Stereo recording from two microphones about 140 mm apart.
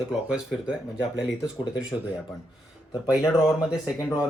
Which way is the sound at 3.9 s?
20° left (ahead or behind).